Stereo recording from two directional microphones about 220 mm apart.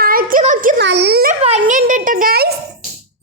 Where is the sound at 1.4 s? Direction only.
30° right (ahead or behind).